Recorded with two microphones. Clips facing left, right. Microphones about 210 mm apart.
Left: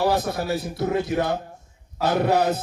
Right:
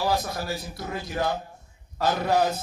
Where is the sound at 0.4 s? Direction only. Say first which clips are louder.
Left 7 dB; 60° left (ahead or behind).